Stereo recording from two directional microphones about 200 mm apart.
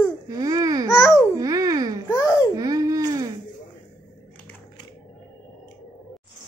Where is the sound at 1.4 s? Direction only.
20° right (ahead or behind).